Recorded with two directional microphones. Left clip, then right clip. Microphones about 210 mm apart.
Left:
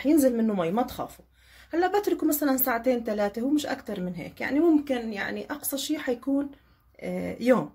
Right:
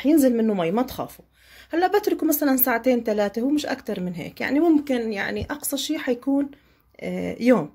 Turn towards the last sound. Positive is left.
turn(degrees=-30)  # may be behind; listen again after turning